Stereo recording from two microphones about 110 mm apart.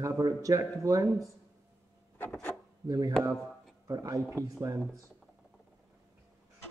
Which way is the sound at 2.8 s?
35° right (ahead or behind).